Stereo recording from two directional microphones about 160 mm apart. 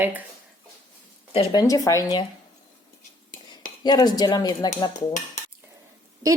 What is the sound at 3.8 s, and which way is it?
Speech, 25° left (ahead or behind).